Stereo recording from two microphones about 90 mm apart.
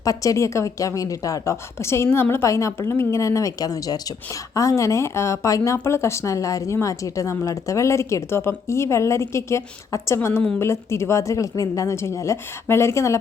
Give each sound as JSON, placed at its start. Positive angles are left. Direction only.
{"t": 0.0, "sound": "a woman's voice", "side_deg": 40}